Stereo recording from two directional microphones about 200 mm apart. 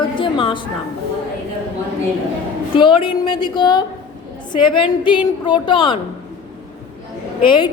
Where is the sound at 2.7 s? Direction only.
25° left (ahead or behind).